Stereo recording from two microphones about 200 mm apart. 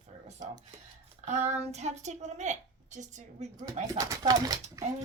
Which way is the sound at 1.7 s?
35° right (ahead or behind).